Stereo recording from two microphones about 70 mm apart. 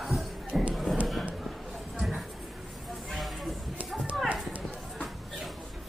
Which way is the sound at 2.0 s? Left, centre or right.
Centre.